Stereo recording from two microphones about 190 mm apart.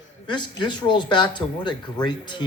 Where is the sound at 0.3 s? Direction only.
25° left (ahead or behind).